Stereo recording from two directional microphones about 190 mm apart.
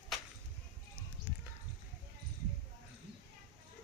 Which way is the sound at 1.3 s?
10° right (ahead or behind).